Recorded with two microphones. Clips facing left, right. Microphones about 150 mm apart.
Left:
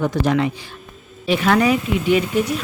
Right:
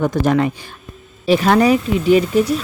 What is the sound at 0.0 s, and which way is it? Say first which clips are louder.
Speech: right 3 dB; 45° right (ahead or behind).